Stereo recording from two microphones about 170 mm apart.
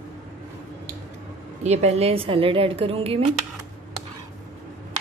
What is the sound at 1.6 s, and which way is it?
Speech, 40° right (ahead or behind).